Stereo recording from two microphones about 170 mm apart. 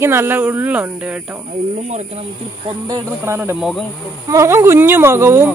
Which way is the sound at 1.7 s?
45° right (ahead or behind).